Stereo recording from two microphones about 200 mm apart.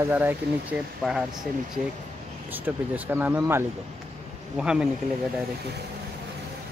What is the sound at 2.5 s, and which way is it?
Speech, 10° right (ahead or behind).